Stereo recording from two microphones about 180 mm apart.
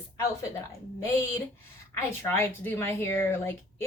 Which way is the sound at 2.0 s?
10° left (ahead or behind).